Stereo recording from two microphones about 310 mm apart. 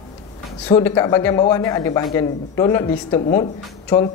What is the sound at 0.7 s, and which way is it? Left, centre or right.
A woman's voice, centre.